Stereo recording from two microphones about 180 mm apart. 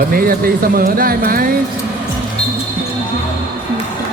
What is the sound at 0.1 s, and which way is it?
Speech, 55° right (ahead or behind).